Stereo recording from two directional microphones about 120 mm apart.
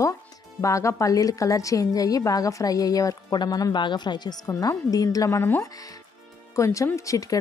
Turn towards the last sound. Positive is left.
turn(degrees=30)  # may be behind; listen again after turning